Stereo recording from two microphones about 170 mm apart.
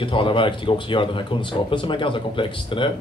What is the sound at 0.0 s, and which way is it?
Speech, 30° left (ahead or behind).